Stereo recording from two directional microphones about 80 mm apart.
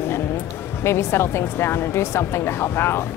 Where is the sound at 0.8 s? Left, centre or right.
Left.